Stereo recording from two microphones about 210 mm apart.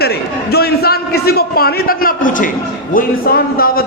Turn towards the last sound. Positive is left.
turn(degrees=45)  # may be behind; listen again after turning